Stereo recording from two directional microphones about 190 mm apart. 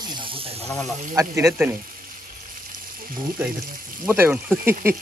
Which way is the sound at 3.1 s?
45° right (ahead or behind).